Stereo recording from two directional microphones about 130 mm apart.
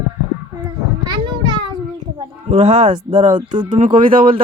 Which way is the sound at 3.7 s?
90° right.